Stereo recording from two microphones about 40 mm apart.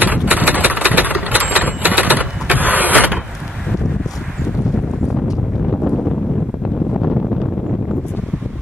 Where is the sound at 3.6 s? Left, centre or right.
Centre.